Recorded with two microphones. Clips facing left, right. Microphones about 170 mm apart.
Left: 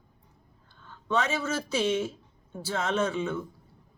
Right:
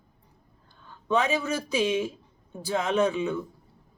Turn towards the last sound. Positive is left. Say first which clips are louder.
# right 3 dB
turn(degrees=-15)  # may be behind; listen again after turning